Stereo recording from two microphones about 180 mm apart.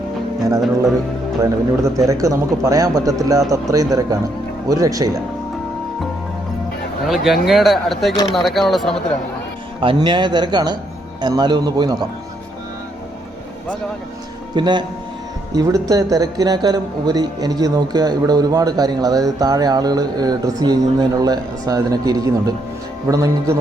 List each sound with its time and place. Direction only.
1.4 s a man's voice: 20° right (ahead or behind)
7.4 s speech: centre (ahead or behind)
9.8 s a man's voice: 25° right (ahead or behind)
14.5 s a man's voice: 25° right (ahead or behind)